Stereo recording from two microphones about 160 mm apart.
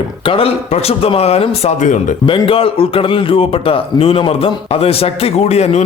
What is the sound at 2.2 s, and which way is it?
A man's voice, 35° left (ahead or behind).